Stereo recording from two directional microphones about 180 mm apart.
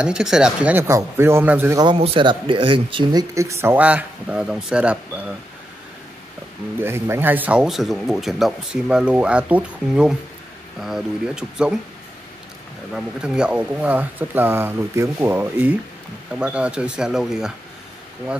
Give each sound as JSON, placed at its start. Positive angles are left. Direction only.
{"t": 0.0, "sound": "speech", "side_deg": -5}
{"t": 2.0, "sound": "speech", "side_deg": -30}
{"t": 6.8, "sound": "speech", "side_deg": -15}
{"t": 12.9, "sound": "speech", "side_deg": -5}